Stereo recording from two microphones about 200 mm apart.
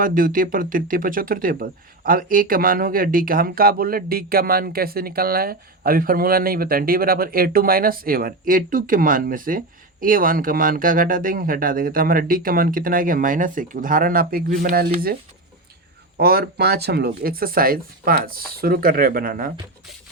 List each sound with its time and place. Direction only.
0.0 s speech: 45° right (ahead or behind)